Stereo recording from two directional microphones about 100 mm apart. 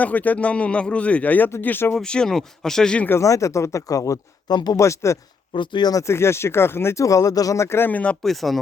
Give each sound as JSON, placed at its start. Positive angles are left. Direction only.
{"t": 0.0, "sound": "speech", "side_deg": 15}
{"t": 2.0, "sound": "speech", "side_deg": 10}
{"t": 3.1, "sound": "speech", "side_deg": 30}
{"t": 4.5, "sound": "speech", "side_deg": 45}
{"t": 4.8, "sound": "speech", "side_deg": 30}
{"t": 5.5, "sound": "speech", "side_deg": 50}
{"t": 5.9, "sound": "speech", "side_deg": 30}
{"t": 8.2, "sound": "speech", "side_deg": 0}